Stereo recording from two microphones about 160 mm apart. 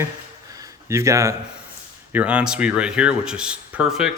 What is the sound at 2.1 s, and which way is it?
Speech, 10° right (ahead or behind).